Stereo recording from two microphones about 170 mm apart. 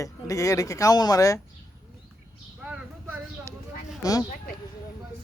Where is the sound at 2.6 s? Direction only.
10° right (ahead or behind).